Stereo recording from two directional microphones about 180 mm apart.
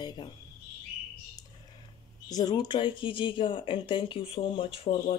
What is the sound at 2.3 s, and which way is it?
A woman's voice, 20° left (ahead or behind).